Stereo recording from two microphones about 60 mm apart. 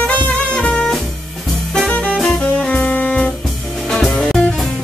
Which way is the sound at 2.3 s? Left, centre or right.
Left.